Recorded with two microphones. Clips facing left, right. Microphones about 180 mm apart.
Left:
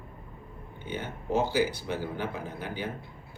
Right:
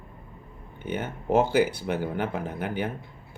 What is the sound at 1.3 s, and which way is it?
Speech, 60° right (ahead or behind).